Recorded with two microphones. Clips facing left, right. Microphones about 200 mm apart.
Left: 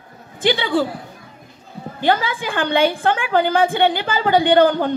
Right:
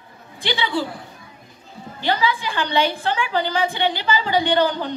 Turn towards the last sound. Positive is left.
turn(degrees=50)  # may be behind; listen again after turning